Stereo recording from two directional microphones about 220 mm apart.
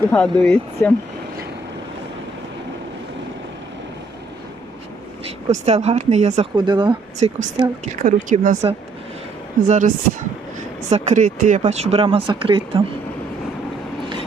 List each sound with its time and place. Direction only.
0.1 s speech: 5° left (ahead or behind)
5.5 s speech: 30° right (ahead or behind)
6.6 s speech: 20° right (ahead or behind)
8.0 s speech: 35° right (ahead or behind)
9.6 s speech: 35° right (ahead or behind)